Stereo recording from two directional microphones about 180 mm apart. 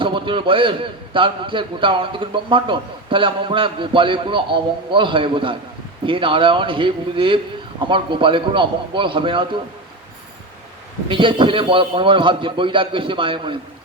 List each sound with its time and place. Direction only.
0.0 s a man's voice: 30° right (ahead or behind)
11.1 s a man's voice: 25° right (ahead or behind)